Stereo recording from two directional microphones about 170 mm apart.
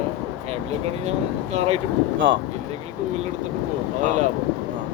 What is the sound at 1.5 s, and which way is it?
Speech, 35° right (ahead or behind).